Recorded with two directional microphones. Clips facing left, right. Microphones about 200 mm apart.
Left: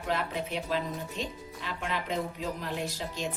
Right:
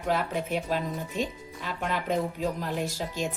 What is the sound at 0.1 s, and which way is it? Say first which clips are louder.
Speech: right 4 dB; 45° right (ahead or behind).